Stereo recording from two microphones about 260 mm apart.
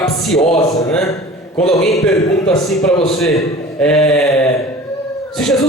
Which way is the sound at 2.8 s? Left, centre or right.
Centre.